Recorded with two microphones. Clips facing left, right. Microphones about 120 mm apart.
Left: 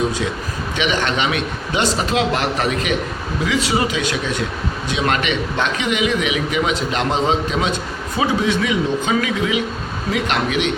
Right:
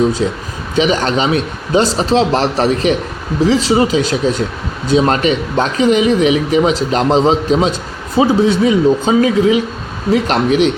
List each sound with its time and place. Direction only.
0.8 s speech: 35° right (ahead or behind)